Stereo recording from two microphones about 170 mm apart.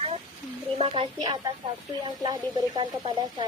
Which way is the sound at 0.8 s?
35° right (ahead or behind).